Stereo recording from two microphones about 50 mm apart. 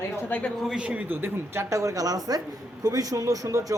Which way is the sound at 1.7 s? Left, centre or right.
Right.